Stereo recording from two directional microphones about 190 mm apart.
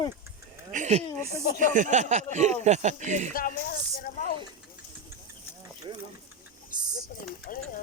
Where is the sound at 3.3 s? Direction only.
50° left (ahead or behind).